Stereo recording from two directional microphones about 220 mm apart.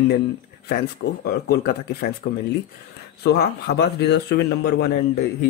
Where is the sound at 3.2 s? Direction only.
45° left (ahead or behind).